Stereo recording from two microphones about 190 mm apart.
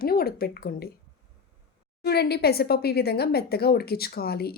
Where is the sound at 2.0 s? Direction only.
55° left (ahead or behind).